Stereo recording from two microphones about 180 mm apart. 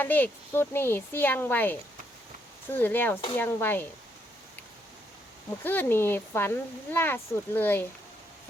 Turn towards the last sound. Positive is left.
turn(degrees=10)  # may be behind; listen again after turning